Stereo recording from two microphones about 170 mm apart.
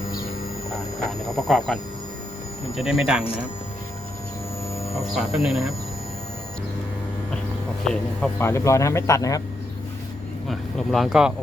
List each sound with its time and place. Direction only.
0.7 s speech: centre (ahead or behind)
4.9 s speech: centre (ahead or behind)
8.4 s speech: 15° left (ahead or behind)
10.5 s speech: centre (ahead or behind)